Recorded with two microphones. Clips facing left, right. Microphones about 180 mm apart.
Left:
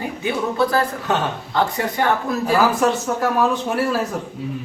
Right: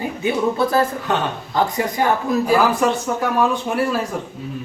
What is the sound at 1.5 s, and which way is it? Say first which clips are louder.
A woman's voice: right 2 dB; 10° right (ahead or behind).